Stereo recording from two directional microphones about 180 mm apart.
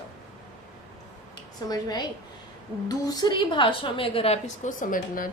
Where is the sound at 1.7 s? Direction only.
20° left (ahead or behind).